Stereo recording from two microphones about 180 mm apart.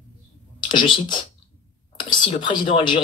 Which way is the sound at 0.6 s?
25° left (ahead or behind).